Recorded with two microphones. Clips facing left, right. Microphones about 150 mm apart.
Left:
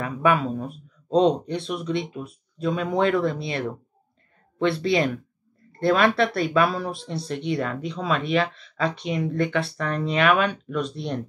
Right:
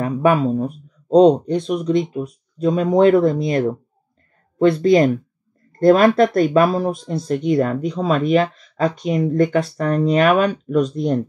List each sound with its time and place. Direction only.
0.0 s speech: 35° right (ahead or behind)